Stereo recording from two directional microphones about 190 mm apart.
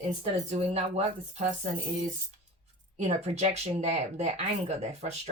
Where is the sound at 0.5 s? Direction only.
35° right (ahead or behind).